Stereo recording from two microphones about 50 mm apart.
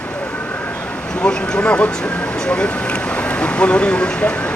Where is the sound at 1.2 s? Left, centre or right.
Left.